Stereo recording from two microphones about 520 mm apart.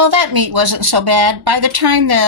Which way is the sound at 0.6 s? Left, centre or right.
Right.